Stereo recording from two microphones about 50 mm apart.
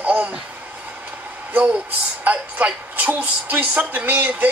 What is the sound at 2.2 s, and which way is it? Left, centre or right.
A woman's voice, right.